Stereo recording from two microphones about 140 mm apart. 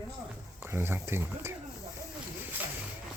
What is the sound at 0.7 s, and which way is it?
Speech, 15° right (ahead or behind).